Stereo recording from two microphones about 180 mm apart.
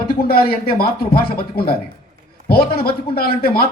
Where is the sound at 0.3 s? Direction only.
55° left (ahead or behind).